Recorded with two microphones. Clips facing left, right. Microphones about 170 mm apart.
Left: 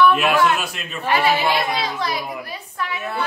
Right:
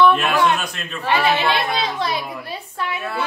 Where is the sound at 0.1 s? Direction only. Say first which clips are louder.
Even; 5° left (ahead or behind).